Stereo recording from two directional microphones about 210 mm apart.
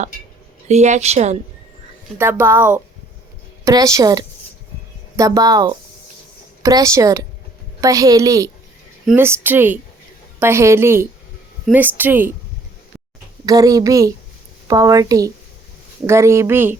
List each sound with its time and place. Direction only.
0.7 s a woman's voice: 30° right (ahead or behind)
2.1 s a woman's voice: 10° right (ahead or behind)
13.4 s a woman's voice: 15° right (ahead or behind)